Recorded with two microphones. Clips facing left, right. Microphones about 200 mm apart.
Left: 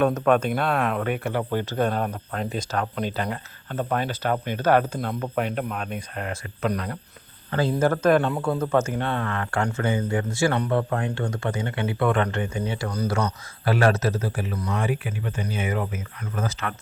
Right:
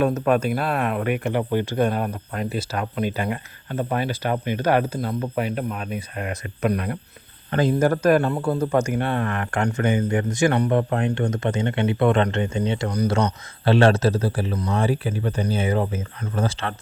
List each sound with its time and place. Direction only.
0.0 s speech: 10° right (ahead or behind); by 16.7 s 30° right (ahead or behind)